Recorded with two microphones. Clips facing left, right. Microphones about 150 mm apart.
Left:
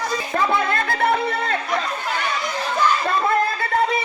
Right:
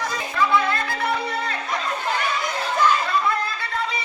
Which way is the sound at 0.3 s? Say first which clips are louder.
Even; 45° left (ahead or behind).